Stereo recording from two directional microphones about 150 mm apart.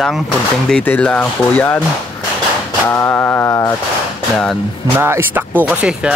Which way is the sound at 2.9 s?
15° left (ahead or behind).